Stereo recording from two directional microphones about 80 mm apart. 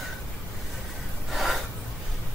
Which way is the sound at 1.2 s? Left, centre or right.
Centre.